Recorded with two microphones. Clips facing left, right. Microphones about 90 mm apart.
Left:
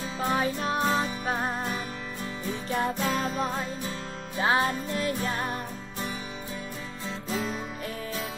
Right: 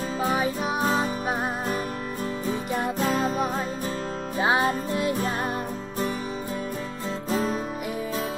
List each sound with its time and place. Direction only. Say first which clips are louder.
0.2 s music: right 1 dB; 5° right (ahead or behind)
3.0 s music: right 4 dB; 40° right (ahead or behind)
4.4 s music: right 2 dB; 20° right (ahead or behind)
5.1 s music: right 3 dB; 35° right (ahead or behind)
7.2 s music: right 5 dB; 40° right (ahead or behind)